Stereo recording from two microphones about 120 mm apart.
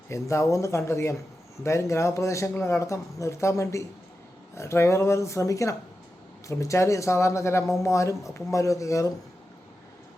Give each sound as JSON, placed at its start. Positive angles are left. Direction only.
{"t": 0.1, "sound": "speech", "side_deg": 25}